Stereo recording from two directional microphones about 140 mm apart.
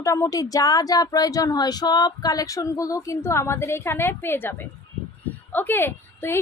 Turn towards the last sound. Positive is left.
turn(degrees=15)  # may be behind; listen again after turning